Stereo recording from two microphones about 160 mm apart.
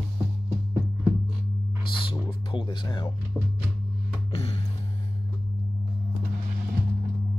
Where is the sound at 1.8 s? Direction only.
30° left (ahead or behind).